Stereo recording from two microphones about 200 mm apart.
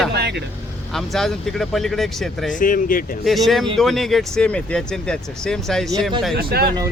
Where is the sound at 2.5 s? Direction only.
40° left (ahead or behind).